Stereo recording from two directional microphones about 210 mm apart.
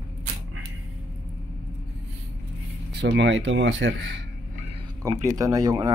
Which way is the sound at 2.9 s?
55° right (ahead or behind).